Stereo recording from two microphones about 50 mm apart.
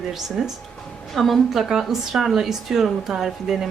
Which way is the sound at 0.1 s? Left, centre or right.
Centre.